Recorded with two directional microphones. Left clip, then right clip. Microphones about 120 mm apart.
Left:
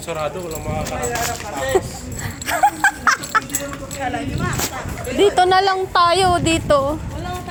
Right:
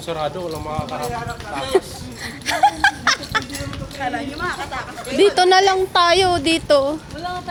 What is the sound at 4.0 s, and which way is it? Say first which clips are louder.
Speech: even; centre (ahead or behind).